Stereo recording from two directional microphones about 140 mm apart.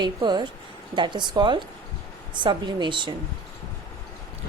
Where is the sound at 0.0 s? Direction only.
30° right (ahead or behind).